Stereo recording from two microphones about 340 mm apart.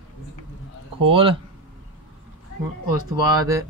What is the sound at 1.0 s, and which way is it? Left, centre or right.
Speech, centre.